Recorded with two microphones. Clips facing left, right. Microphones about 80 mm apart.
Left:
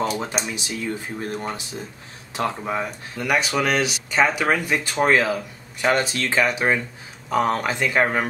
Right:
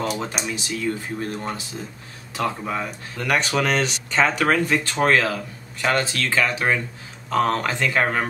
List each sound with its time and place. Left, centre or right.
0.0 s speech: left
3.3 s speech: centre